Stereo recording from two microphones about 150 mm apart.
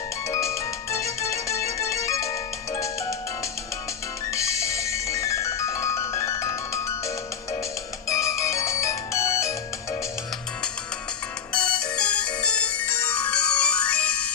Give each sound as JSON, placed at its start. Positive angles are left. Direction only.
{"t": 0.3, "sound": "music", "side_deg": 20}
{"t": 4.3, "sound": "music", "side_deg": 20}
{"t": 8.0, "sound": "music", "side_deg": 20}
{"t": 11.5, "sound": "music", "side_deg": 5}